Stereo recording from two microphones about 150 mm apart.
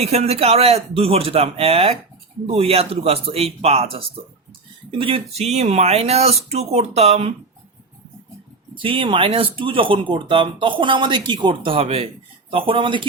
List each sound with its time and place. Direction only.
0.0 s speech: 45° right (ahead or behind)
8.7 s speech: 35° right (ahead or behind)